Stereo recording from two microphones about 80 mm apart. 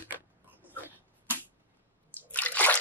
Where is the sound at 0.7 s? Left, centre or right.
Left.